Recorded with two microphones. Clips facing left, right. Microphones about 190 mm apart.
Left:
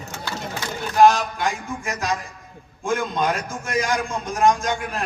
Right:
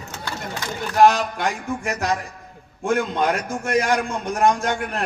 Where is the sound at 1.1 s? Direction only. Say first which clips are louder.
Even; 65° right (ahead or behind).